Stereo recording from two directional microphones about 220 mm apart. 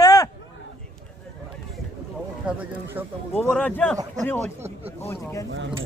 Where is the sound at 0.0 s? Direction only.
15° left (ahead or behind).